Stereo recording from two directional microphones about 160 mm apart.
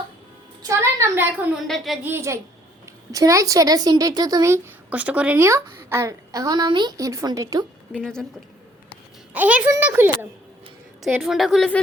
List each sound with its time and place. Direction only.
0.7 s a woman's voice: 15° right (ahead or behind)
1.6 s a woman's voice: centre (ahead or behind)
2.0 s a child's voice: 15° right (ahead or behind)
7.9 s a woman's voice: 5° left (ahead or behind)
9.3 s a child's voice: 10° right (ahead or behind)
11.0 s a woman's voice: centre (ahead or behind)